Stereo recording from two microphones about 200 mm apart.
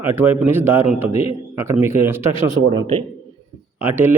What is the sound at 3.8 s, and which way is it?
Speech, 10° right (ahead or behind).